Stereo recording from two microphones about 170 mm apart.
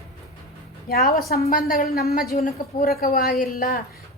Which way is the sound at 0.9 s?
65° left (ahead or behind).